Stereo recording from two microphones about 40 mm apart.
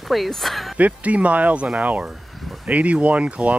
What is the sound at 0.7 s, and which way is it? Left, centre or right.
Speech, right.